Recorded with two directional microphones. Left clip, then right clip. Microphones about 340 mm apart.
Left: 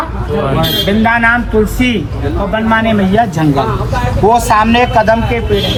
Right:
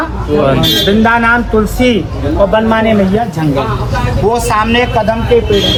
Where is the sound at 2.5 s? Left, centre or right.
Centre.